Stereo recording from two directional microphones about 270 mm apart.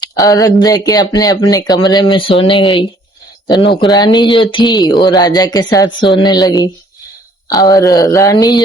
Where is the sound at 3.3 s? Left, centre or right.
Centre.